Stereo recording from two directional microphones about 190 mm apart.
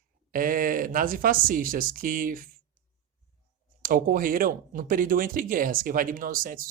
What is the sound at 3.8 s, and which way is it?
Speech, 45° right (ahead or behind).